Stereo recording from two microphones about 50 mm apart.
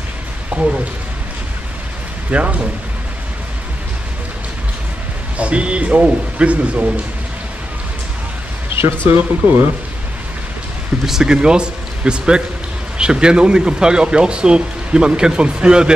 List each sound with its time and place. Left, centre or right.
0.5 s a sound: right
2.3 s speech: right
5.4 s speech: right
9.1 s speech: right
11.1 s speech: centre